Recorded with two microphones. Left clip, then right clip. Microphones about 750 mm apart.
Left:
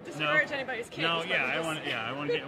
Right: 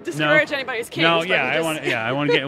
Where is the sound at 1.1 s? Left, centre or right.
Right.